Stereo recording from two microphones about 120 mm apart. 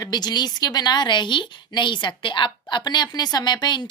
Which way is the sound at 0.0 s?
35° left (ahead or behind).